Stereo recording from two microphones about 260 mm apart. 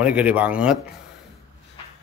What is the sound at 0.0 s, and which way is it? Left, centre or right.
Speech, centre.